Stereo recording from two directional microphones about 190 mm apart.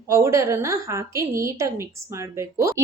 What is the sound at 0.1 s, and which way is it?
A woman's voice, 15° right (ahead or behind).